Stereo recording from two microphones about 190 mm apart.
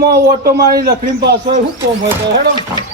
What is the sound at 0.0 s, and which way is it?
Speech, 55° right (ahead or behind).